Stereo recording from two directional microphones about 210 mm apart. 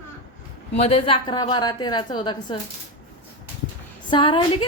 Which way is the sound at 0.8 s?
25° left (ahead or behind).